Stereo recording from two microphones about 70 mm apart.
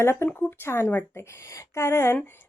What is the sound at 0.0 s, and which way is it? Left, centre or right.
Speech, left.